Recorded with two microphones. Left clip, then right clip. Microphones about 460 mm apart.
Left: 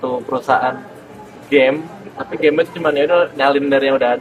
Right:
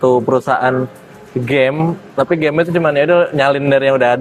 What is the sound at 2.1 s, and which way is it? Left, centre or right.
A man's voice, right.